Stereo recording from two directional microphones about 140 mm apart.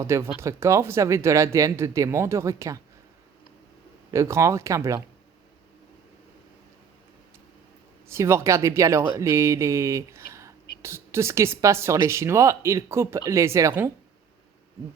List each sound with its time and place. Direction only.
0.0 s speech: 20° right (ahead or behind)
4.1 s speech: 20° right (ahead or behind)
8.0 s speech: 20° right (ahead or behind)